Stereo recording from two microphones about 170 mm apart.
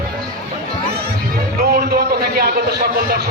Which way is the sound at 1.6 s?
65° right (ahead or behind).